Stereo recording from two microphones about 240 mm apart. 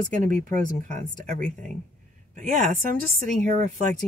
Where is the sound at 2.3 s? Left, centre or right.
Right.